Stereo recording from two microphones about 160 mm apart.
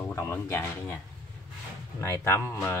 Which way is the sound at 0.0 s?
20° left (ahead or behind).